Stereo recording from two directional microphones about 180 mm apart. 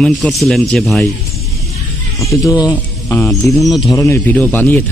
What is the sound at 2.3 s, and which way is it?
Speech, 20° left (ahead or behind).